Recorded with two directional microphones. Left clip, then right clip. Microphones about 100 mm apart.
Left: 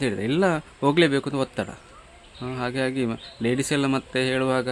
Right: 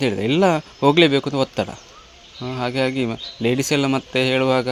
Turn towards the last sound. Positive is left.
turn(degrees=-25)  # may be behind; listen again after turning